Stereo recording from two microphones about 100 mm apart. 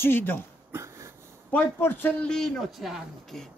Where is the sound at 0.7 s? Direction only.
30° right (ahead or behind).